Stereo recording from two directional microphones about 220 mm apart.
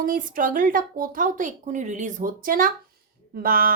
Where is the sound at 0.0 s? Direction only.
40° right (ahead or behind).